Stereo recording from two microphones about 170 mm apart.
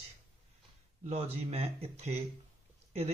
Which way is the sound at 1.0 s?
35° right (ahead or behind).